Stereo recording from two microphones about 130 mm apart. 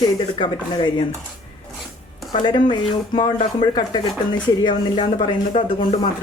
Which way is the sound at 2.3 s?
35° left (ahead or behind).